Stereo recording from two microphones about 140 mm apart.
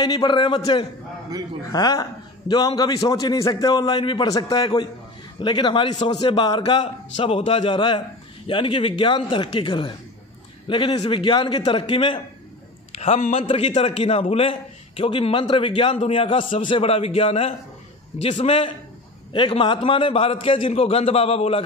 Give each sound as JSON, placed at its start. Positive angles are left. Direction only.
{"t": 0.0, "sound": "a man's voice", "side_deg": 30}